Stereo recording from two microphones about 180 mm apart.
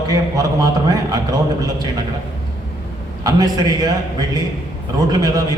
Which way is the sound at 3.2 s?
20° right (ahead or behind).